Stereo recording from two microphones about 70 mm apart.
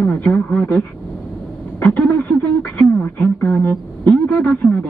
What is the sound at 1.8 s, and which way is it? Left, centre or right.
Speech, left.